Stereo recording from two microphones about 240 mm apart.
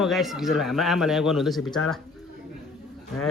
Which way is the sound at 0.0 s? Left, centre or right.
Centre.